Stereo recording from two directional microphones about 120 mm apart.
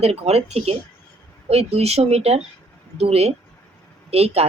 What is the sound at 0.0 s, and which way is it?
Speech, 60° right (ahead or behind).